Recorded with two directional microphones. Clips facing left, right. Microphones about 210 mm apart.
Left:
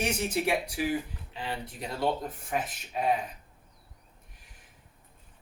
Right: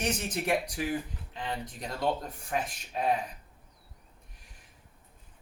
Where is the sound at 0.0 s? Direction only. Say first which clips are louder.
Left 3 dB; 10° left (ahead or behind).